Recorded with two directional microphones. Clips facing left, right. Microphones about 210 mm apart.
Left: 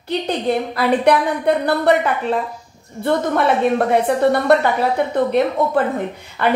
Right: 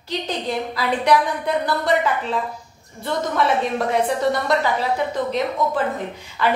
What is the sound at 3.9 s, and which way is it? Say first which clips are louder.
A woman's voice: left 5 dB; 60° left (ahead or behind).